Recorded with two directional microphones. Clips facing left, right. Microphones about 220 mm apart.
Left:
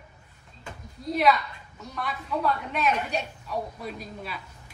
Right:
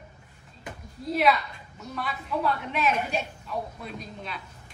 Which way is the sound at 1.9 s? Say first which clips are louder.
Even; centre (ahead or behind).